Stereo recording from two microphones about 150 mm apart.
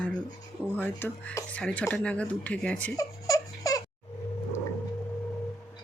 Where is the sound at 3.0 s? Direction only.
25° left (ahead or behind).